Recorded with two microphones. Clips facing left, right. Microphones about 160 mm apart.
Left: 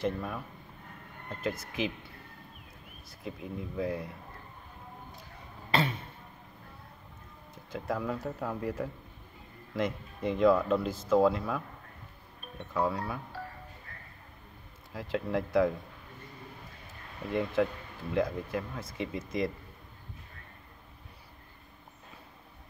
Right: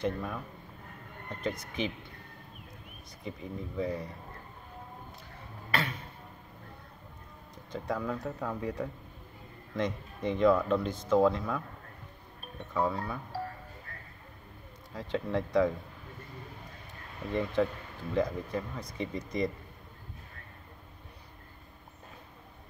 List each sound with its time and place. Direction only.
0.0 s speech: 5° left (ahead or behind)
5.7 s a sound: 25° left (ahead or behind)
7.5 s speech: 5° left (ahead or behind)
12.7 s speech: centre (ahead or behind)
14.9 s speech: 5° left (ahead or behind)
17.3 s speech: centre (ahead or behind)